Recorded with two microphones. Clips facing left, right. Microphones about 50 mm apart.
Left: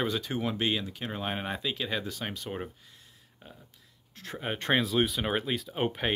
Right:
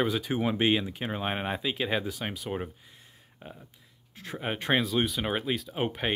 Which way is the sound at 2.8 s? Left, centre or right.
Right.